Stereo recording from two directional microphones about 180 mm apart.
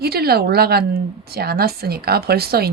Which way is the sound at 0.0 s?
60° right (ahead or behind).